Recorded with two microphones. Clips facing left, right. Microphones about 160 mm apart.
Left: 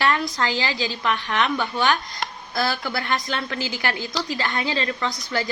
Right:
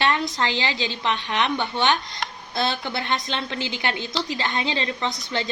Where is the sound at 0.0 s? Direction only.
20° right (ahead or behind).